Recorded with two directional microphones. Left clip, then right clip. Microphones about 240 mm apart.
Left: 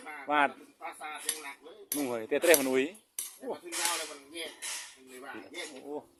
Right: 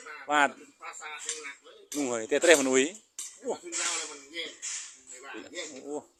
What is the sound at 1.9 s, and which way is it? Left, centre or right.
Speech, centre.